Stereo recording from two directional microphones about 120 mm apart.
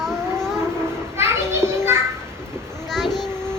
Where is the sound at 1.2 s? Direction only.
20° right (ahead or behind).